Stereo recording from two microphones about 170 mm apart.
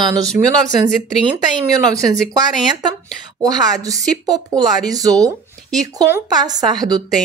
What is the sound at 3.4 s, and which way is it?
Speech, 20° right (ahead or behind).